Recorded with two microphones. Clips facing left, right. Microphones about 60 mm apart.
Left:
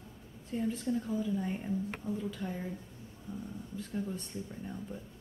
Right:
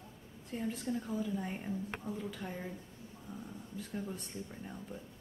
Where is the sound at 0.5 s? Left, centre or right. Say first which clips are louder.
Left 4 dB; centre.